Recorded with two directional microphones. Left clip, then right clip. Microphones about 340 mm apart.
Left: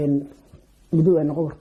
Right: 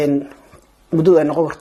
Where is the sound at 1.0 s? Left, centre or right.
Centre.